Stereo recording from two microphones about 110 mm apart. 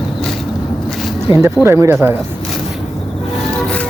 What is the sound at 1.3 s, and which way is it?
Speech, 50° left (ahead or behind).